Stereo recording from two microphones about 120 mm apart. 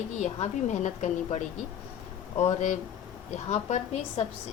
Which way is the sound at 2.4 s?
80° left.